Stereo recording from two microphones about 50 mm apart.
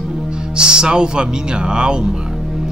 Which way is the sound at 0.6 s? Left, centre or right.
Centre.